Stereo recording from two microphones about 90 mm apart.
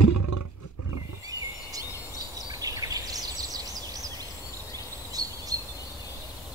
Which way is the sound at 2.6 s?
40° right (ahead or behind).